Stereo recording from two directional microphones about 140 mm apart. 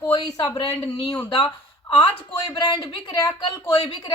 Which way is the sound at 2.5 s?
35° left (ahead or behind).